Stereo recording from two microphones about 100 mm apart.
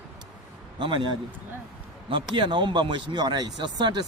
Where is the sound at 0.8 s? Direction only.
55° right (ahead or behind).